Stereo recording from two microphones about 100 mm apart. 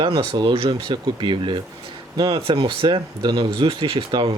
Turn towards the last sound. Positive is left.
turn(degrees=-55)  # may be behind; listen again after turning